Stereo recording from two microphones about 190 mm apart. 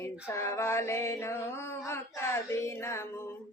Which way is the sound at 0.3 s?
15° left (ahead or behind).